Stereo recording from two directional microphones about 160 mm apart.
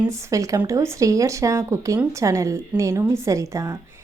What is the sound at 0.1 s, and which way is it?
Speech, 20° right (ahead or behind).